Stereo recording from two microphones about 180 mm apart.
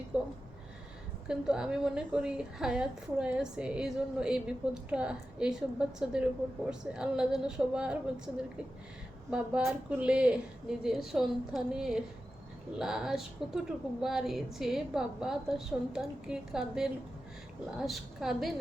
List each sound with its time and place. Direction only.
0.1 s a woman's voice: 5° right (ahead or behind)
9.3 s a woman's voice: 5° right (ahead or behind)